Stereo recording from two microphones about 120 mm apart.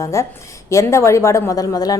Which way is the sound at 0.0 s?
25° left (ahead or behind).